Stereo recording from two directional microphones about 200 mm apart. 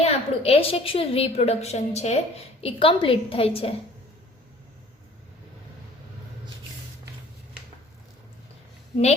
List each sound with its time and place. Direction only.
0.0 s a woman's voice: 30° left (ahead or behind)